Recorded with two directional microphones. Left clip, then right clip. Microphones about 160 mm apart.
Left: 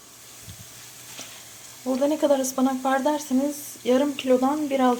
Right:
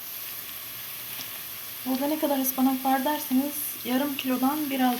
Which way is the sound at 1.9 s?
25° left (ahead or behind).